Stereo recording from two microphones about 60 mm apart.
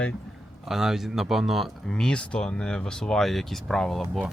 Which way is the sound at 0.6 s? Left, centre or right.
Centre.